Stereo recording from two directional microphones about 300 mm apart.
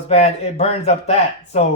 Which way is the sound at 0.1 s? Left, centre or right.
Left.